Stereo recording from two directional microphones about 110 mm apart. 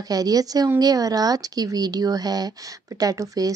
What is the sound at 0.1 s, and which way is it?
Speech, 35° right (ahead or behind).